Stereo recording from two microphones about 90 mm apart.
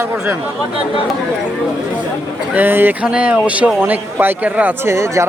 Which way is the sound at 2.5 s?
20° right (ahead or behind).